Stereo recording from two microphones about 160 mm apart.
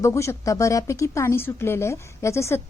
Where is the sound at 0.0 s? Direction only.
20° left (ahead or behind).